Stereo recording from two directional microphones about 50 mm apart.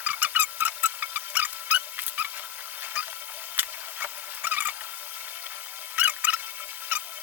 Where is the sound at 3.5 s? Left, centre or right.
Right.